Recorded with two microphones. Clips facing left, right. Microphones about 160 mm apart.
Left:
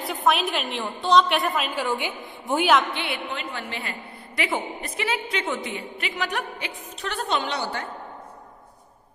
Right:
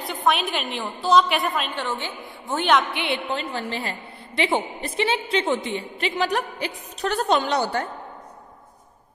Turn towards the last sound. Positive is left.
turn(degrees=-40)  # may be behind; listen again after turning